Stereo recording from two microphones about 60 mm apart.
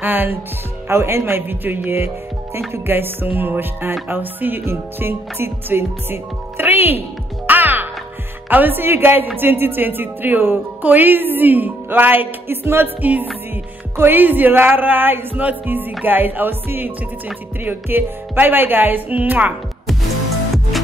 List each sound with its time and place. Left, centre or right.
0.0 s speech: right
0.8 s speech: right
7.4 s music: right
8.5 s speech: right
20.7 s music: centre